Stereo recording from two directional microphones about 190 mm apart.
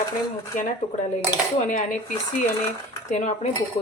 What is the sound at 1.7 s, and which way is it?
A woman's voice, 45° left (ahead or behind).